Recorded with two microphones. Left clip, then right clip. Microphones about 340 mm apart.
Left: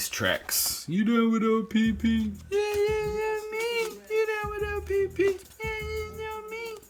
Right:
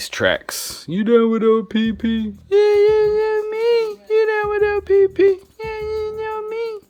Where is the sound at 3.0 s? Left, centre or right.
Centre.